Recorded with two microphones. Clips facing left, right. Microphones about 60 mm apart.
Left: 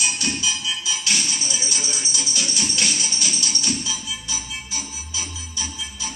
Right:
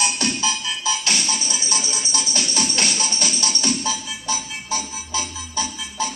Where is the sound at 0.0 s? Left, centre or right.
Right.